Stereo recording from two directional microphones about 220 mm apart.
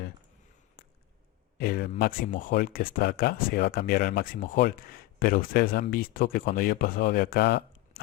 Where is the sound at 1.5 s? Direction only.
40° left (ahead or behind).